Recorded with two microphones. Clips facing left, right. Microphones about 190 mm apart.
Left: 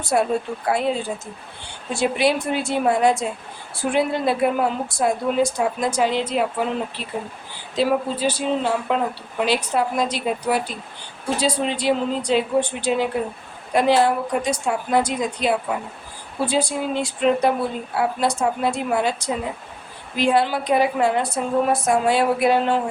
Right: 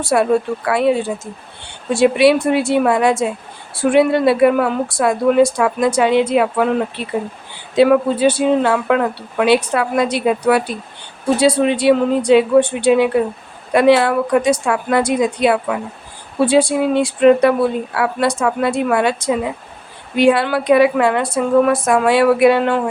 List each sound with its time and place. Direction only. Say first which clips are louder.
0.0 s a woman's voice: right 6 dB; 90° right; by 15.8 s 75° right (ahead or behind)
16.4 s speech: right 8 dB; 90° right
20.1 s a woman's voice: right 6 dB; 70° right (ahead or behind)